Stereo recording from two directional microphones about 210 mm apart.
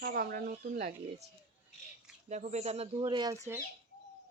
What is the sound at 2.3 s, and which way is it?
Speech, 35° right (ahead or behind).